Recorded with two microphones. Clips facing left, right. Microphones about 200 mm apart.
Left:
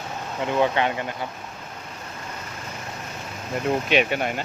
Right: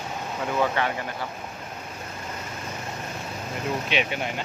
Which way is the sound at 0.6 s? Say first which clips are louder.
Left 3 dB; 20° left (ahead or behind).